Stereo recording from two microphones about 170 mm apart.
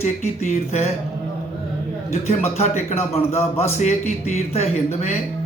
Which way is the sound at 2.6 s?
40° left (ahead or behind).